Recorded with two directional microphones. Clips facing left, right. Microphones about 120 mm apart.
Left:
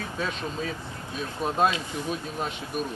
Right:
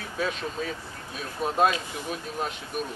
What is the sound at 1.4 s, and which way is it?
Speech, centre (ahead or behind).